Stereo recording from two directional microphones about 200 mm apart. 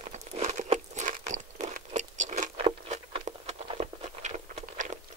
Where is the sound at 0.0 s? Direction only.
35° right (ahead or behind).